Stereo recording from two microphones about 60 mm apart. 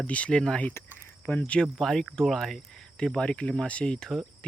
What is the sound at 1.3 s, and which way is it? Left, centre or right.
Speech, left.